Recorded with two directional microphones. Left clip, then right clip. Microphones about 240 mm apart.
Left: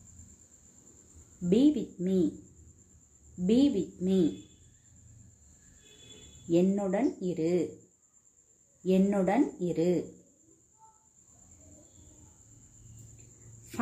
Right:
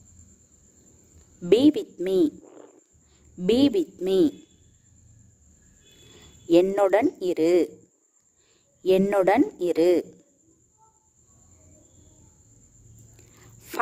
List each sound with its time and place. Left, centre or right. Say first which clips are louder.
1.5 s speech: right 7 dB; right
3.4 s speech: right 6 dB; right
6.5 s speech: right 10 dB; right
8.8 s speech: right 8 dB; right